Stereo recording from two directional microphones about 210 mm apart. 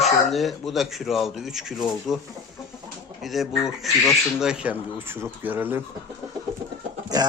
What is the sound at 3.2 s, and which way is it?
Speech, centre (ahead or behind).